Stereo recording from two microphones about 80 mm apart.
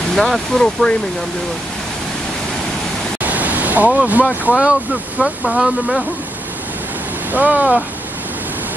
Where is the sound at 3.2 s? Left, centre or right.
Centre.